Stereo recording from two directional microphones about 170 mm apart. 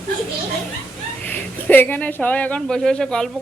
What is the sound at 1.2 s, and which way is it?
Speech, 10° left (ahead or behind).